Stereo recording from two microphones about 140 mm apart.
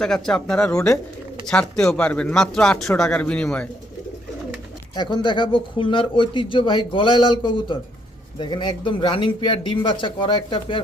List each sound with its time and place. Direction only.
0.0 s speech: 5° left (ahead or behind)
4.9 s speech: 30° left (ahead or behind)